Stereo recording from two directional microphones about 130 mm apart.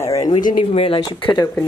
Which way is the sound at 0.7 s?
40° left (ahead or behind).